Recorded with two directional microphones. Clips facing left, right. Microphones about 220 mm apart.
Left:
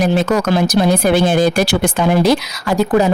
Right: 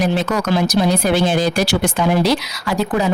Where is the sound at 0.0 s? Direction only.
45° left (ahead or behind).